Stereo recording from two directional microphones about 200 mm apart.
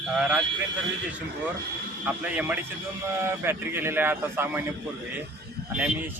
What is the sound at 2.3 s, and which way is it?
Speech, 5° right (ahead or behind).